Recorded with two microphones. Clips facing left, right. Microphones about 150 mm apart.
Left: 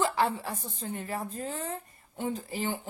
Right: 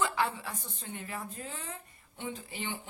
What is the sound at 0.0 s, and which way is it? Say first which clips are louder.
A woman's voice: left 4 dB; 35° left (ahead or behind).